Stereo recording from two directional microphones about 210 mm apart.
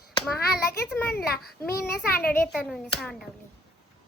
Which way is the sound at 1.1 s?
45° left (ahead or behind).